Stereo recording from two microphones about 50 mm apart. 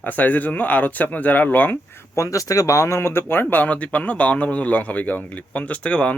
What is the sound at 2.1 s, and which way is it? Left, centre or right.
Speech, left.